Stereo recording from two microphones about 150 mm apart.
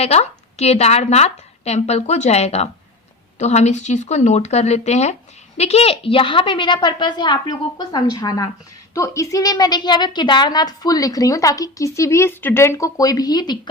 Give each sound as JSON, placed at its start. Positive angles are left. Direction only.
{"t": 0.0, "sound": "a woman's voice", "side_deg": 45}